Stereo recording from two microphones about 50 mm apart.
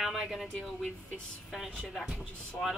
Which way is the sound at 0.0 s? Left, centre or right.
Centre.